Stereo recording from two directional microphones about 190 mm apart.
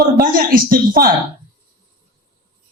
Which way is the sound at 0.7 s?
50° right (ahead or behind).